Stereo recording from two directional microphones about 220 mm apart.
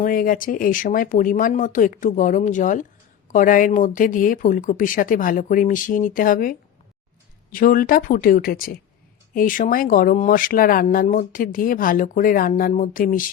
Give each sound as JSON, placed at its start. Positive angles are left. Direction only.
{"t": 0.0, "sound": "speech", "side_deg": 40}